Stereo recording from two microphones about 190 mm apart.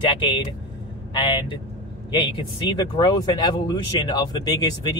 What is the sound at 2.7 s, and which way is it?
Speech, 25° left (ahead or behind).